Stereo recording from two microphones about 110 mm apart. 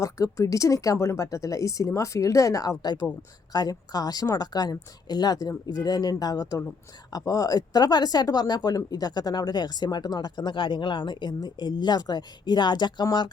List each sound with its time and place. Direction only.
0.0 s speech: 30° left (ahead or behind)